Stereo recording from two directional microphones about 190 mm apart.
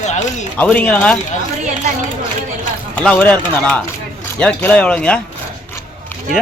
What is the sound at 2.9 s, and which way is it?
Speech, 5° left (ahead or behind).